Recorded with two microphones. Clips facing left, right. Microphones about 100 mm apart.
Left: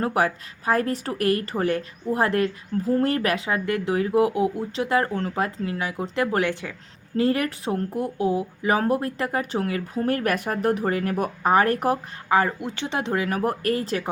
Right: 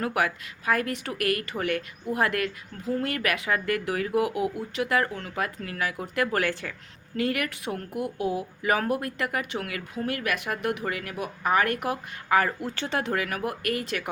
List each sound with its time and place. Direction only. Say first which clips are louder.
0.0 s speech: left 4 dB; 30° left (ahead or behind)
7.2 s speech: left 6 dB; 30° left (ahead or behind)
12.3 s speech: left 2 dB; 25° left (ahead or behind)